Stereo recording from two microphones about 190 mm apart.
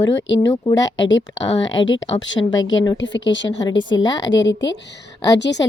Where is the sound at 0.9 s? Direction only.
75° left (ahead or behind).